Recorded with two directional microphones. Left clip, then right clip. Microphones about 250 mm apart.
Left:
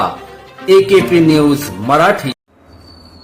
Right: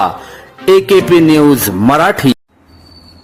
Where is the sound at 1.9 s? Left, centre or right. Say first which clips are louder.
Even; right.